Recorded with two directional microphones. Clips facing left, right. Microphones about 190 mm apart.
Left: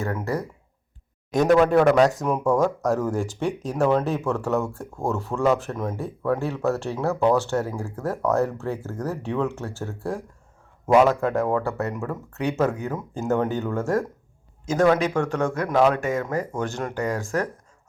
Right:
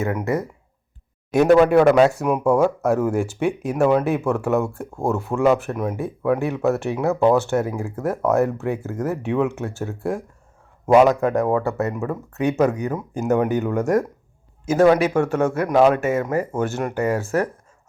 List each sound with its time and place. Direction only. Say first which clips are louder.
0.0 s speech: right 4 dB; 20° right (ahead or behind)
1.5 s speech: right 3 dB; 10° right (ahead or behind)
14.6 s a sound: right 5 dB; 5° right (ahead or behind)
15.2 s speech: right 4 dB; 15° right (ahead or behind)